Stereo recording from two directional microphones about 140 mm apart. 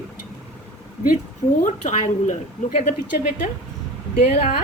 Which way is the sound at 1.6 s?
60° left (ahead or behind).